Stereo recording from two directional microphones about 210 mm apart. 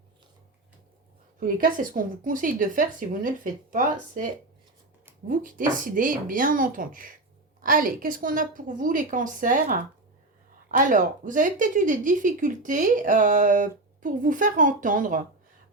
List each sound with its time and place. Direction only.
1.4 s speech: 40° right (ahead or behind)
5.3 s speech: 40° right (ahead or behind)